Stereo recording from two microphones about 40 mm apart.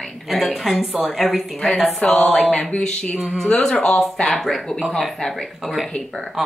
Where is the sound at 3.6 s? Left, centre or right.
Centre.